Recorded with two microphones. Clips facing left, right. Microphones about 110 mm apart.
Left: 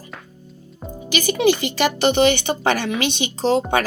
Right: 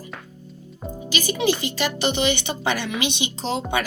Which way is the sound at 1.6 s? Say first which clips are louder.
Left 5 dB; 60° left (ahead or behind).